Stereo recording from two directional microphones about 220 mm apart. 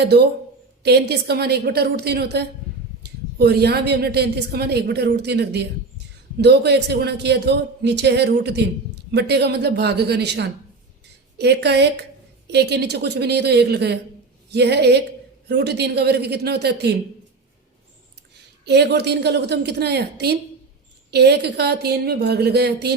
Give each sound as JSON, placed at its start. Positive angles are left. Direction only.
{"t": 0.0, "sound": "a woman's voice", "side_deg": -50}
{"t": 18.6, "sound": "a woman's voice", "side_deg": -50}